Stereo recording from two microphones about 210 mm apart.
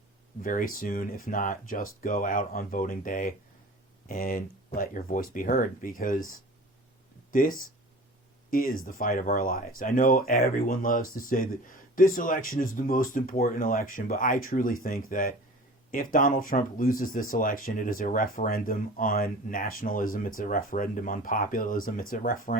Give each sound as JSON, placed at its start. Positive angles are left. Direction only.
{"t": 0.4, "sound": "speech", "side_deg": 40}